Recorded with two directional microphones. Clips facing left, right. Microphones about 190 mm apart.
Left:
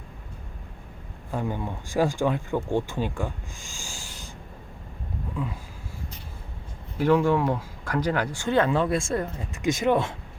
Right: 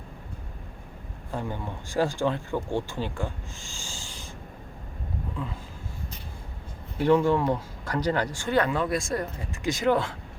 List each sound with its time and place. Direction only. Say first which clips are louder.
1.3 s speech: left 3 dB; 15° left (ahead or behind)
7.0 s speech: even; 5° left (ahead or behind)
8.4 s speech: left 3 dB; 20° left (ahead or behind)